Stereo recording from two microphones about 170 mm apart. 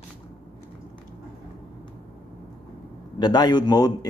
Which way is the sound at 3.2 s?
25° left (ahead or behind).